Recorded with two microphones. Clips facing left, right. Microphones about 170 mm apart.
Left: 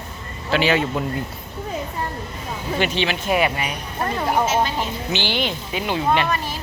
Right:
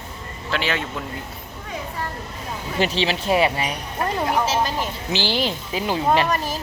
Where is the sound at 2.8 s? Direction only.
35° right (ahead or behind).